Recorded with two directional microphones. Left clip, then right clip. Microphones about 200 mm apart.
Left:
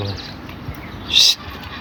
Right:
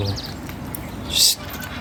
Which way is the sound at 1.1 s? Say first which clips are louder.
Left 5 dB; 10° right (ahead or behind).